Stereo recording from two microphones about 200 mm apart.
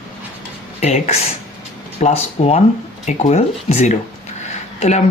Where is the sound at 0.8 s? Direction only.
30° left (ahead or behind).